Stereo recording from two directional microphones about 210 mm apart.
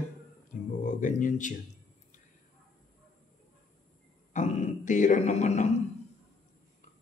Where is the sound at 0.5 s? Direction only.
40° left (ahead or behind).